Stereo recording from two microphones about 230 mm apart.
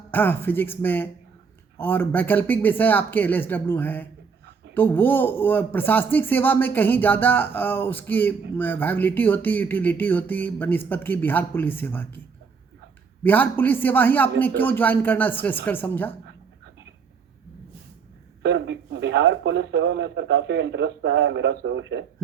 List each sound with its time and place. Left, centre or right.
0.1 s speech: centre
13.2 s speech: centre
18.4 s speech: right